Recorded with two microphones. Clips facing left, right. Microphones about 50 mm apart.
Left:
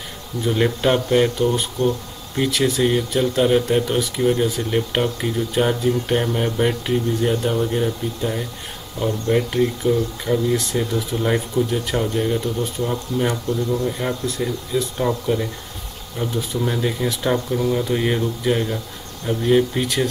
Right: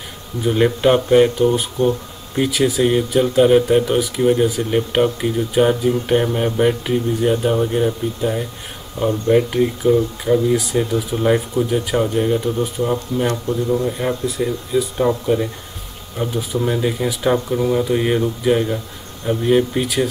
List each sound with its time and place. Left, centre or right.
0.4 s speech: centre; by 13.6 s right
13.8 s speech: centre